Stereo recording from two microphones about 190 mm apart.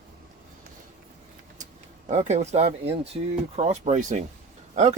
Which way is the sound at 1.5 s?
40° right (ahead or behind).